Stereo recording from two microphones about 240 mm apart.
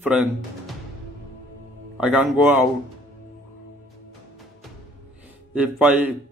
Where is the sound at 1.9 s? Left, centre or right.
Centre.